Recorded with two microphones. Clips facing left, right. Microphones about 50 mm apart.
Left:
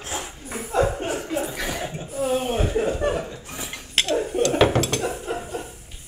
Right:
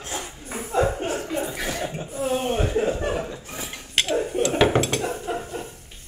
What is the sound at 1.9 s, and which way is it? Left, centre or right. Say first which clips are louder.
Chuckle: left 1 dB; centre.